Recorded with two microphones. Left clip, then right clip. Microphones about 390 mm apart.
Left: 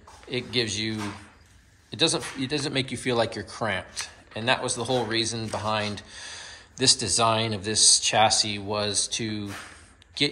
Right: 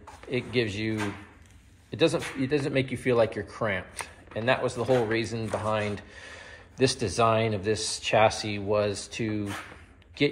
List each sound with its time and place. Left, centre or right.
0.5 s speech: centre
7.3 s speech: left
7.6 s speech: centre